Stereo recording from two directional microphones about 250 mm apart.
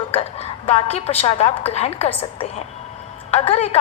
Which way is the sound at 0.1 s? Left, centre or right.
Left.